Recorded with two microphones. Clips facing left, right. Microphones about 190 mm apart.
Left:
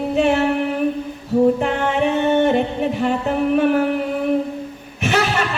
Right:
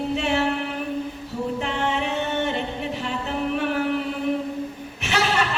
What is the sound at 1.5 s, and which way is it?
Music, 55° left (ahead or behind).